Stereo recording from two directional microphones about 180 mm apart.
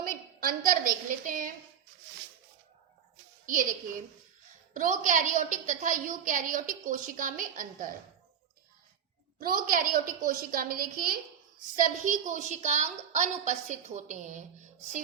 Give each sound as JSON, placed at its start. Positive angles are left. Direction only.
{"t": 0.1, "sound": "a sound", "side_deg": -50}
{"t": 3.4, "sound": "a child's voice", "side_deg": -50}
{"t": 4.7, "sound": "a woman's voice", "side_deg": -50}
{"t": 9.4, "sound": "a woman's voice", "side_deg": -55}